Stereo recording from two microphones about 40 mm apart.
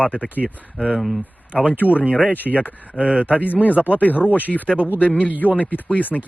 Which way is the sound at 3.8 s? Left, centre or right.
Left.